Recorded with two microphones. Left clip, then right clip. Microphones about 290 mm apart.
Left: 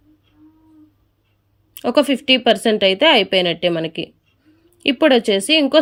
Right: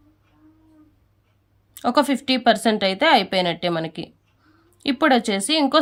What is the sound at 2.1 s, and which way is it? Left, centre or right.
Speech, right.